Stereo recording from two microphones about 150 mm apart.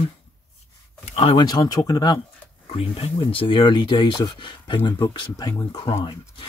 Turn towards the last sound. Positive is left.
turn(degrees=30)  # may be behind; listen again after turning